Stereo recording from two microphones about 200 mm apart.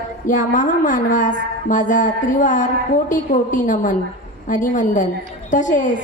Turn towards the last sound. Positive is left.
turn(degrees=40)  # may be behind; listen again after turning